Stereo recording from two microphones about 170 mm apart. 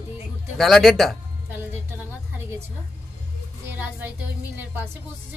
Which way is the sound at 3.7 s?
10° right (ahead or behind).